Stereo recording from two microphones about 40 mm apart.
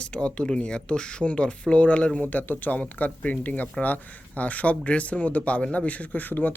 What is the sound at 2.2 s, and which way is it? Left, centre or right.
Speech, left.